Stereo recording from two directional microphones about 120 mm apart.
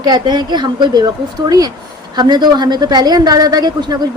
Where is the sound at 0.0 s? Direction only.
40° right (ahead or behind).